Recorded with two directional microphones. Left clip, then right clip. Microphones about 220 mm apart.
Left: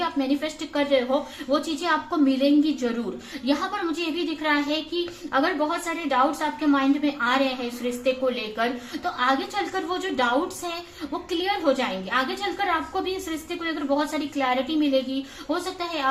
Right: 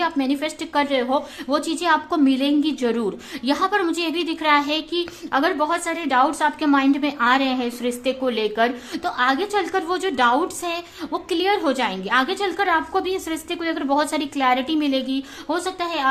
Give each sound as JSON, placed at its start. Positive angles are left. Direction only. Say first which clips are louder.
{"t": 0.0, "sound": "a woman's voice", "louder": "right 3 dB", "side_deg": -45}
{"t": 11.3, "sound": "a woman's voice", "louder": "right 3 dB", "side_deg": -45}